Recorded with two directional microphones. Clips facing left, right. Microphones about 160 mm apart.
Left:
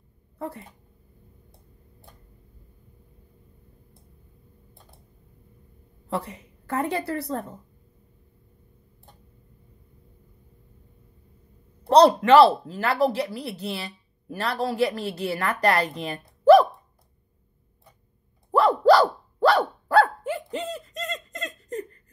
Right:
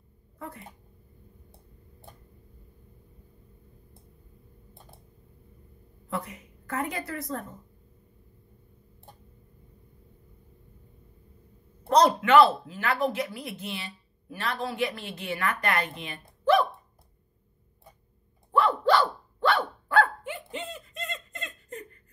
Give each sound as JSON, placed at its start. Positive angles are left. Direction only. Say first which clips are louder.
{"t": 0.4, "sound": "speech", "louder": "left 7 dB", "side_deg": 30}
{"t": 6.0, "sound": "speech", "louder": "left 4 dB", "side_deg": 30}
{"t": 11.9, "sound": "speech", "louder": "left 5 dB", "side_deg": 35}
{"t": 16.0, "sound": "a sound", "louder": "left 8 dB", "side_deg": 40}
{"t": 18.5, "sound": "dog", "louder": "left 6 dB", "side_deg": 40}